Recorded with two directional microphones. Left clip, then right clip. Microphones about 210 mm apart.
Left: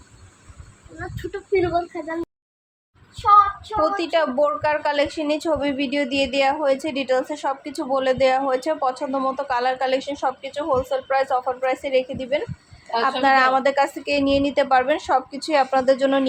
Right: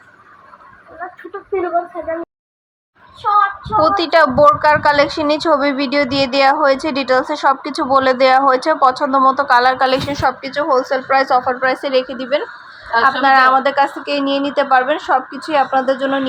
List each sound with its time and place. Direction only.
3.8 s a woman's voice: 15° right (ahead or behind)